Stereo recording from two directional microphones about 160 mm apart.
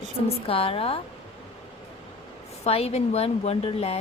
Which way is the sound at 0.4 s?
35° left (ahead or behind).